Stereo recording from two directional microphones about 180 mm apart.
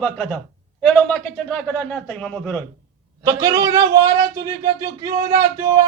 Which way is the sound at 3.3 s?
20° right (ahead or behind).